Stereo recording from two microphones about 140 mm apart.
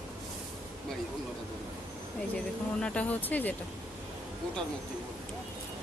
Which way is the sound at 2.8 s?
10° left (ahead or behind).